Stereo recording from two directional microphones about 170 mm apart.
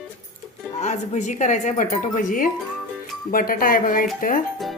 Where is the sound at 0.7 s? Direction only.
45° left (ahead or behind).